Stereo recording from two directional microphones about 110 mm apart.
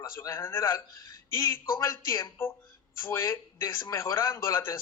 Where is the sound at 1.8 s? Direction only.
30° left (ahead or behind).